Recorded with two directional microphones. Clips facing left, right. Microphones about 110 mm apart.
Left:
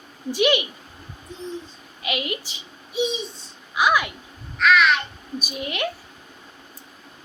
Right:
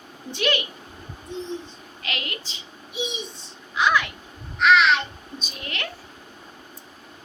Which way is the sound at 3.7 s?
10° left (ahead or behind).